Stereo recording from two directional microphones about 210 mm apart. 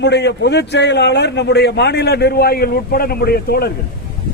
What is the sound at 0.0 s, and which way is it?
A man's voice, 55° left (ahead or behind).